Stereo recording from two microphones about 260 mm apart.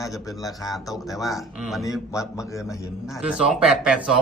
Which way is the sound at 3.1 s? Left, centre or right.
Centre.